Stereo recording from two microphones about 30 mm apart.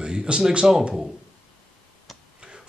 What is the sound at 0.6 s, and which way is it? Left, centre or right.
Speech, right.